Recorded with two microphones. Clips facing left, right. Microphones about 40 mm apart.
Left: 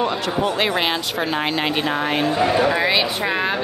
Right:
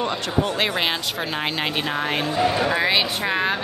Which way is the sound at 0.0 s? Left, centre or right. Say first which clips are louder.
Left 3 dB; centre.